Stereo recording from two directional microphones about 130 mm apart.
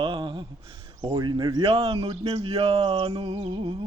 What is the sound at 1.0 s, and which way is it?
Speech, 25° right (ahead or behind).